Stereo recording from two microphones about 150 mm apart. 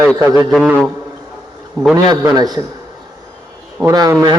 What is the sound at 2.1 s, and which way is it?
Speech, 25° right (ahead or behind).